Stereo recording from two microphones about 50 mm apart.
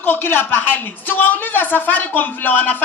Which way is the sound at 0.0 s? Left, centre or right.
Left.